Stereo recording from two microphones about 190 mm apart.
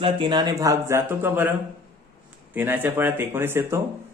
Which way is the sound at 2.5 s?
10° right (ahead or behind).